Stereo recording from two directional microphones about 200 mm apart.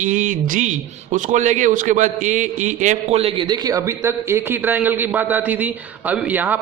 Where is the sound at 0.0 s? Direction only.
40° right (ahead or behind).